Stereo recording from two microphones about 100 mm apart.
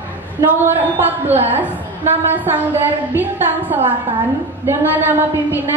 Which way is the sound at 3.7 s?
20° right (ahead or behind).